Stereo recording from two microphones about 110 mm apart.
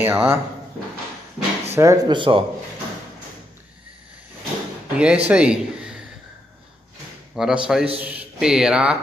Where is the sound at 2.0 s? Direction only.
50° right (ahead or behind).